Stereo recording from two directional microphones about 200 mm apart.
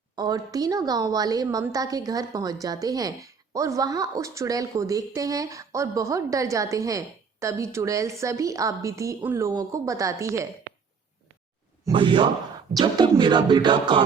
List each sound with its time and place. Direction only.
0.2 s a woman's voice: 20° right (ahead or behind)
11.9 s music: 25° right (ahead or behind)